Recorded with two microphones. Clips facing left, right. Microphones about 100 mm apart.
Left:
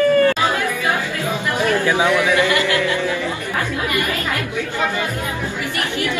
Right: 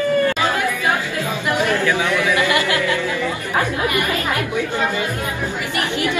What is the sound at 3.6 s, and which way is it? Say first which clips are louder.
Chatter: right 3 dB; 20° right (ahead or behind).